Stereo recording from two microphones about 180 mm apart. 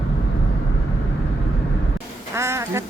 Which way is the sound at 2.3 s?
15° right (ahead or behind).